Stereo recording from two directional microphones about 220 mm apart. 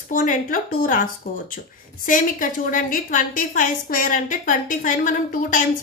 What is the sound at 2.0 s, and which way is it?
A woman's voice, 40° left (ahead or behind).